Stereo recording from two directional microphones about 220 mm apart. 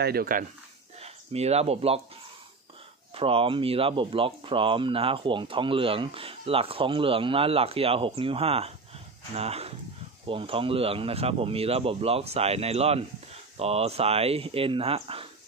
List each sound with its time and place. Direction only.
0.0 s speech: 45° right (ahead or behind)
1.0 s speech: 30° right (ahead or behind)
3.2 s speech: 25° right (ahead or behind)